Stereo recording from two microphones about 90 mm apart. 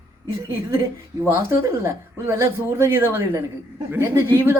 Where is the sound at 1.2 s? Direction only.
30° right (ahead or behind).